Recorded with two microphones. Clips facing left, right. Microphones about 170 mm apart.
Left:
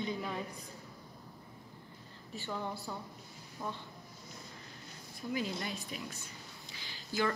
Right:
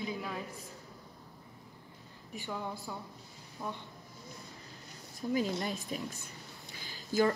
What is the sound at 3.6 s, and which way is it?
Speech, 5° right (ahead or behind).